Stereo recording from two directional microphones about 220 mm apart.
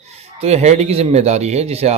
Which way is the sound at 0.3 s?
30° right (ahead or behind).